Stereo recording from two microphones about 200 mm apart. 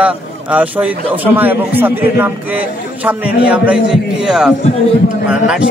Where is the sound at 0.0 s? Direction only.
5° right (ahead or behind).